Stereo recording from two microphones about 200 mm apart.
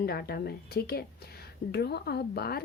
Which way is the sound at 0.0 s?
50° left (ahead or behind).